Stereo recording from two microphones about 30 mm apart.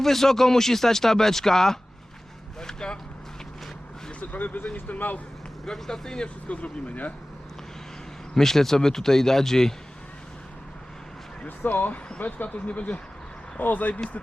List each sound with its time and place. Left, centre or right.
0.0 s speech: centre
4.3 s speech: left
5.6 s speech: centre
6.5 s speech: left
8.4 s speech: centre
11.4 s speech: left
12.5 s speech: left
13.6 s speech: left